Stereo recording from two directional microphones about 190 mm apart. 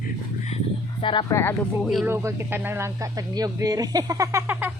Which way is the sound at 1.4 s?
10° left (ahead or behind).